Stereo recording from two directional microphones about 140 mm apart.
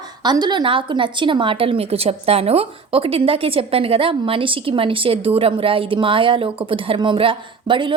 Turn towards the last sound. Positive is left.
turn(degrees=-35)  # may be behind; listen again after turning